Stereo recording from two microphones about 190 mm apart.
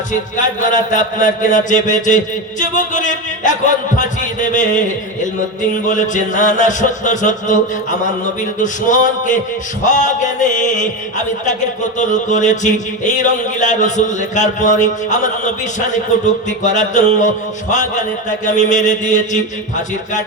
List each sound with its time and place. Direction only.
0.1 s music: 40° left (ahead or behind)